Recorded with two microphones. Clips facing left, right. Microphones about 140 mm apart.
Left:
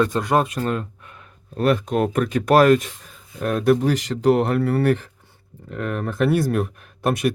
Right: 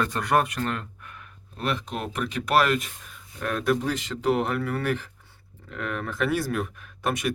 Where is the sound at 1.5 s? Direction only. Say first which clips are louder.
Left 10 dB; 45° left (ahead or behind).